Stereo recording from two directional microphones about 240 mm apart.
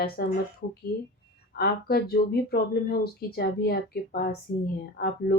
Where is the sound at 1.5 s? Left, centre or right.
Left.